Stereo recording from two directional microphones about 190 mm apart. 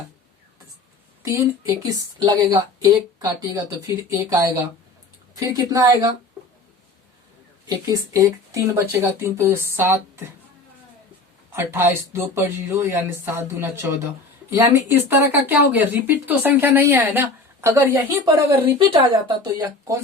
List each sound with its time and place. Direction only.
1.2 s speech: 15° right (ahead or behind)
7.7 s speech: 15° right (ahead or behind)
11.5 s speech: 10° right (ahead or behind)
19.0 s speech: 25° right (ahead or behind)